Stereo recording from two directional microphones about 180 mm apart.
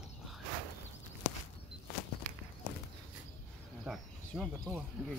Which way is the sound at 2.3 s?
35° left (ahead or behind).